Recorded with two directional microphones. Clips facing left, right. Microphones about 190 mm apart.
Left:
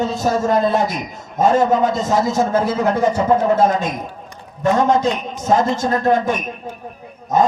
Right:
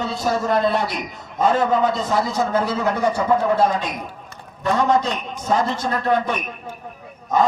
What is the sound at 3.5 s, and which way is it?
Speech, 45° left (ahead or behind).